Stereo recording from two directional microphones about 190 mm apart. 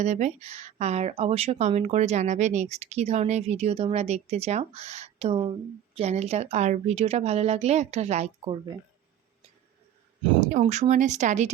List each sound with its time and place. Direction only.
0.0 s speech: 40° right (ahead or behind)
10.6 s speech: 35° right (ahead or behind)